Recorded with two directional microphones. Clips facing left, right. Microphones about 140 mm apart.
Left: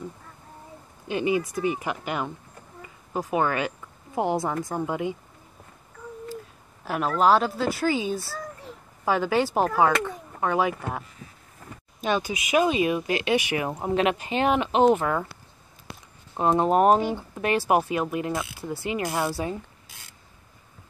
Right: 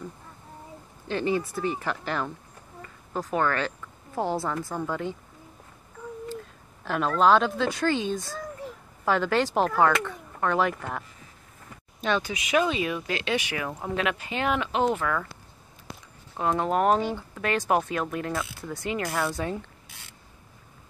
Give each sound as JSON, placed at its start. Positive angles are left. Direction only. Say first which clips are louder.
{"t": 1.0, "sound": "a woman's voice", "louder": "left 2 dB", "side_deg": 10}
{"t": 6.8, "sound": "speech", "louder": "even", "side_deg": 10}
{"t": 13.7, "sound": "speech", "louder": "left 5 dB", "side_deg": 25}
{"t": 16.3, "sound": "speech", "louder": "left 4 dB", "side_deg": 20}